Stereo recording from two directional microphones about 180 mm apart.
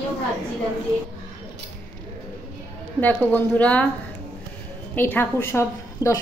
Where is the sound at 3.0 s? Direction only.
10° left (ahead or behind).